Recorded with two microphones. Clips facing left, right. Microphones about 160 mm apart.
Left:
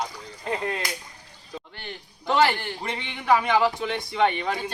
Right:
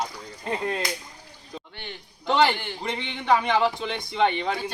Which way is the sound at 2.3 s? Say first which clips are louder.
Even; centre (ahead or behind).